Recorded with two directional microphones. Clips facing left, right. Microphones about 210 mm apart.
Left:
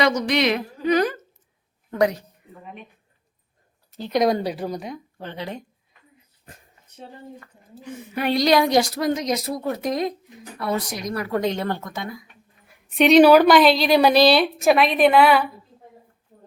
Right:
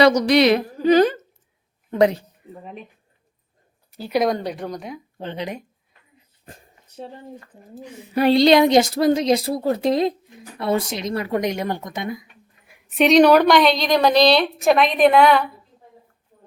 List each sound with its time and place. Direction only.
0.0 s a woman's voice: 35° right (ahead or behind)
3.9 s speech: 10° right (ahead or behind)
4.3 s a woman's voice: 5° left (ahead or behind)
5.1 s a woman's voice: 20° right (ahead or behind)
6.4 s a sound: 30° right (ahead or behind)
8.1 s a woman's voice: 30° right (ahead or behind)
12.6 s a woman's voice: centre (ahead or behind)